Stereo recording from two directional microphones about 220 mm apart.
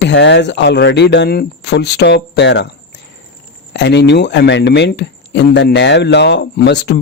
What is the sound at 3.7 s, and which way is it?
Speech, 50° left (ahead or behind).